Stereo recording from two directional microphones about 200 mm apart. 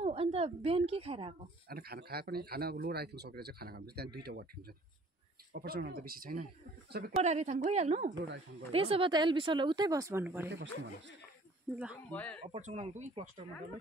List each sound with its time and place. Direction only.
0.0 s a woman's voice: 30° right (ahead or behind)
1.7 s speech: 50° right (ahead or behind)
7.2 s a woman's voice: 35° right (ahead or behind); by 10.5 s 10° right (ahead or behind)
10.5 s speech: 60° right (ahead or behind)
11.7 s speech: 5° right (ahead or behind)
12.1 s speech: 5° left (ahead or behind)
12.5 s a woman's voice: 35° right (ahead or behind)